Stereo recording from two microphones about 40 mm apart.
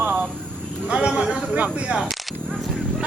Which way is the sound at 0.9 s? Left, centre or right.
Right.